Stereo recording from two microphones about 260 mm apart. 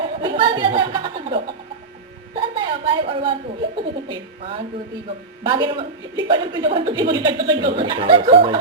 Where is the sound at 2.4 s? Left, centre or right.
Centre.